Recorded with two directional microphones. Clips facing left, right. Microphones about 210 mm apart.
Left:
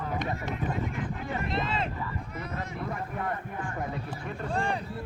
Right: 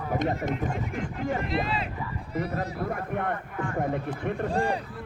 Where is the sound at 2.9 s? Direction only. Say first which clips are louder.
Right 4 dB; 60° right (ahead or behind).